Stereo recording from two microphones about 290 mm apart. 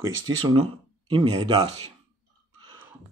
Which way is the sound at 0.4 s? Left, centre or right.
Centre.